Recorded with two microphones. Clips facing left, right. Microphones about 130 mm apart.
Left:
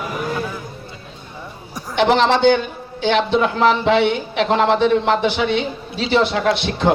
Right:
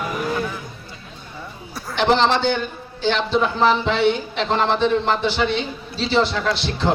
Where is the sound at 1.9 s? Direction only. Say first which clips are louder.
Left 2 dB; 65° left (ahead or behind).